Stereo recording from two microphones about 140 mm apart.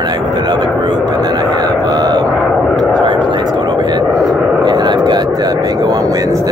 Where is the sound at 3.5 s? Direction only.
30° right (ahead or behind).